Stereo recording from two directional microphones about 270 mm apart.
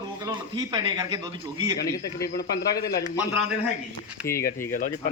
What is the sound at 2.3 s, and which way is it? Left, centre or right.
Speech, left.